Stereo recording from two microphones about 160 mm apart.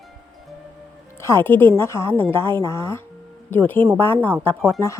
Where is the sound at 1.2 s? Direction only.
15° left (ahead or behind).